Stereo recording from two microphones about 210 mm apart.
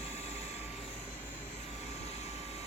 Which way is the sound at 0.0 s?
30° left (ahead or behind).